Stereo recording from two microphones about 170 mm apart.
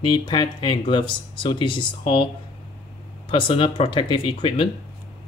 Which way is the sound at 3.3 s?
30° left (ahead or behind).